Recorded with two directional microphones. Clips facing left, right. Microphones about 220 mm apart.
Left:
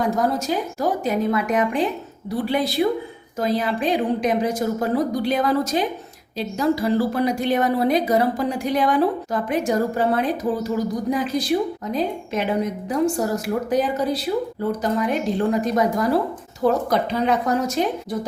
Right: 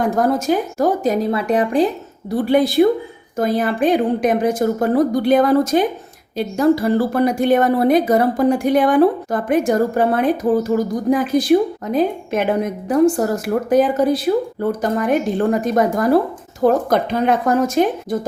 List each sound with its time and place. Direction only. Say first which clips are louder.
0.0 s a woman's voice: right 4 dB; 50° right (ahead or behind); by 1.9 s 35° right (ahead or behind)
2.4 s a woman's voice: right 7 dB; 50° right (ahead or behind)